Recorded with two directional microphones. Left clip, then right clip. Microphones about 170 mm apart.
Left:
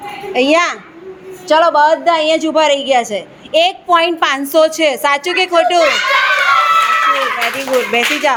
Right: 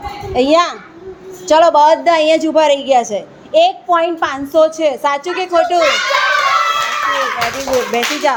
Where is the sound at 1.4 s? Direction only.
15° right (ahead or behind); by 5.9 s centre (ahead or behind).